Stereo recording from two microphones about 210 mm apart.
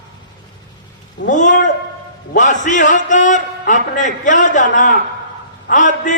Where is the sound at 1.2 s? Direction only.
35° left (ahead or behind).